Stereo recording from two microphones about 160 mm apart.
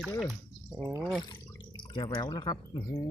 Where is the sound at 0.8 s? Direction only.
20° right (ahead or behind).